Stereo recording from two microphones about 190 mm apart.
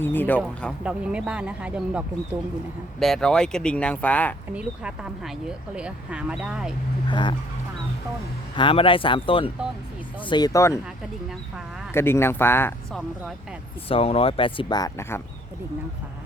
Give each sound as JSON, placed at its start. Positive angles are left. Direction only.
{"t": 0.0, "sound": "speech", "side_deg": 10}
{"t": 0.9, "sound": "speech", "side_deg": -5}
{"t": 4.5, "sound": "speech", "side_deg": -5}
{"t": 7.1, "sound": "speech", "side_deg": 25}
{"t": 8.5, "sound": "speech", "side_deg": 25}
{"t": 11.3, "sound": "speech", "side_deg": -5}
{"t": 11.9, "sound": "speech", "side_deg": 10}
{"t": 13.8, "sound": "speech", "side_deg": 30}